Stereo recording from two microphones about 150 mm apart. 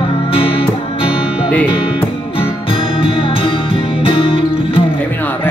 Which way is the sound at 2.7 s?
35° left (ahead or behind).